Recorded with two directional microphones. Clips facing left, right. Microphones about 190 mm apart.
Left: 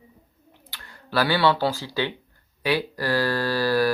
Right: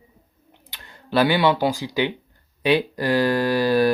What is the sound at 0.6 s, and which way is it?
Speech, 20° right (ahead or behind).